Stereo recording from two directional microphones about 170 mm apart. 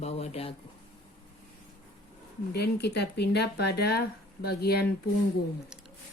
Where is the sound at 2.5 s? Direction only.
75° left (ahead or behind).